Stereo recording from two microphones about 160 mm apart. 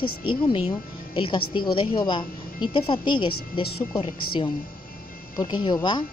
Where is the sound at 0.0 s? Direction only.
30° left (ahead or behind).